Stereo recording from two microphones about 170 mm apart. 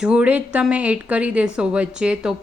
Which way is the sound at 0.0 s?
5° right (ahead or behind).